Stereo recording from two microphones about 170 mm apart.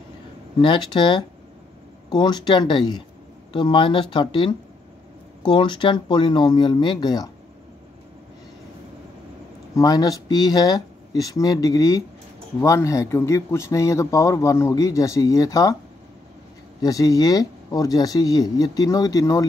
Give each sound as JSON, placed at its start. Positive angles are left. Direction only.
{"t": 0.6, "sound": "speech", "side_deg": 30}
{"t": 9.8, "sound": "speech", "side_deg": 20}
{"t": 16.8, "sound": "speech", "side_deg": 20}